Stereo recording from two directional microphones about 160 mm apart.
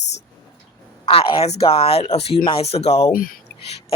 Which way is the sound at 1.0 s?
35° left (ahead or behind).